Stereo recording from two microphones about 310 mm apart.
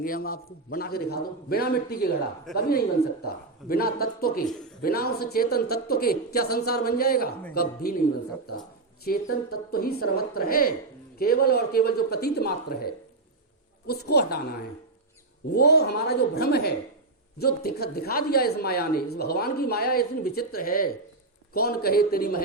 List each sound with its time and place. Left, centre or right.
0.0 s a man's voice: left
2.5 s speech: centre
3.7 s a man's voice: left
9.0 s a man's voice: left
15.5 s a woman's voice: left